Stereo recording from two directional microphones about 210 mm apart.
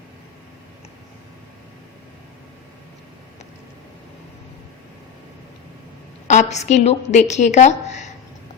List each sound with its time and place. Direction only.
6.2 s a woman's voice: 35° left (ahead or behind)